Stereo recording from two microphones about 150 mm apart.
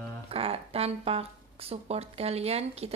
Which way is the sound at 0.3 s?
40° right (ahead or behind).